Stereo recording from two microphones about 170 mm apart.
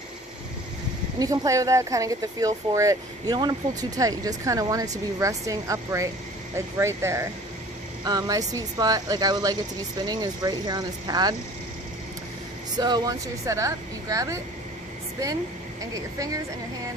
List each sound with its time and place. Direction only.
1.2 s speech: 20° right (ahead or behind)
12.7 s speech: 25° right (ahead or behind)
16.1 s speech: 20° right (ahead or behind)